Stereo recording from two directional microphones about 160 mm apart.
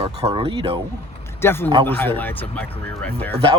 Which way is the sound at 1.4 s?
15° left (ahead or behind).